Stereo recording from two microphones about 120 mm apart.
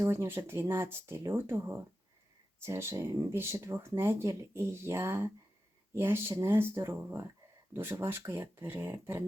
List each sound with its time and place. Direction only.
0.0 s speech: 20° right (ahead or behind)